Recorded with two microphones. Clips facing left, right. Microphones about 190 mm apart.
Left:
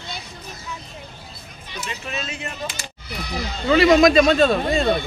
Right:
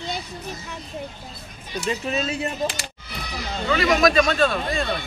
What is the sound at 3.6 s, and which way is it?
Speech, 30° left (ahead or behind).